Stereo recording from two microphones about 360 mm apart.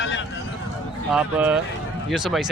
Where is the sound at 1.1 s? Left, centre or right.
Centre.